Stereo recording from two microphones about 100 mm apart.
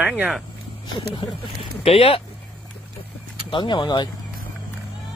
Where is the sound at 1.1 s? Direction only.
65° left (ahead or behind).